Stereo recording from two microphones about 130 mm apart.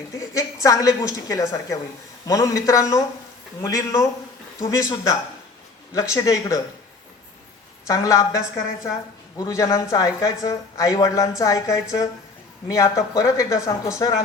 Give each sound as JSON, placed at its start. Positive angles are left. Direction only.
{"t": 0.1, "sound": "a woman's voice", "side_deg": 25}
{"t": 7.9, "sound": "a woman's voice", "side_deg": 25}
{"t": 9.4, "sound": "a woman's voice", "side_deg": 25}